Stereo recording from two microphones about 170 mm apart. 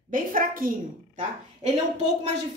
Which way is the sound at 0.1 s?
55° right (ahead or behind).